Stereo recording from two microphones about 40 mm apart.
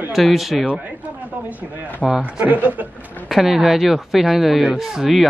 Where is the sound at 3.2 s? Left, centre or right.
Centre.